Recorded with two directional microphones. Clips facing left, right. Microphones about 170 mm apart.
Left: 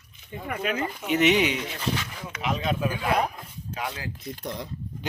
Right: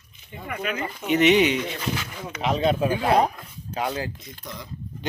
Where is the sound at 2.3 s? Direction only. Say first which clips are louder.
Right 6 dB; 30° right (ahead or behind).